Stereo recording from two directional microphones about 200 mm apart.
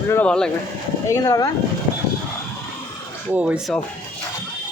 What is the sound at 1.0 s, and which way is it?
Speech, 15° left (ahead or behind).